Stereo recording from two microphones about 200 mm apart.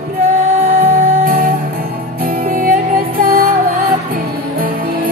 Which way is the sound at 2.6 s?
45° right (ahead or behind).